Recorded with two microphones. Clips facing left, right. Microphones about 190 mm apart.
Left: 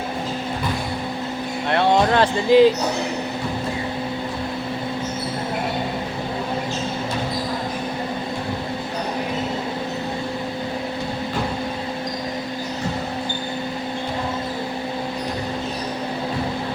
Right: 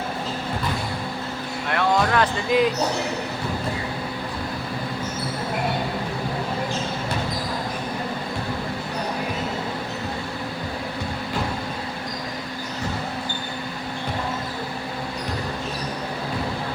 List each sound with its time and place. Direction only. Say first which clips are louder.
1.7 s speech: left 4 dB; 30° left (ahead or behind)